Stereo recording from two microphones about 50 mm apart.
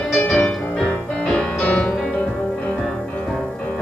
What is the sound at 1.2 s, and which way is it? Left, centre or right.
Music, left.